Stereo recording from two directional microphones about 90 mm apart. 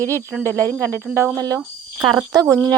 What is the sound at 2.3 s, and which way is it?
Speech, 45° right (ahead or behind).